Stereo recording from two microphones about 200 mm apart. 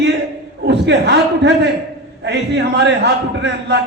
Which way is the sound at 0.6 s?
60° right (ahead or behind).